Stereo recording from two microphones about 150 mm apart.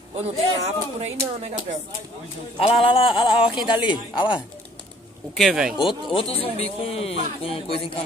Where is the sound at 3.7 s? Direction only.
10° right (ahead or behind).